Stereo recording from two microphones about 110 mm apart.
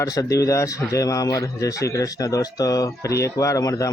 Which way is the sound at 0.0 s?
30° left (ahead or behind).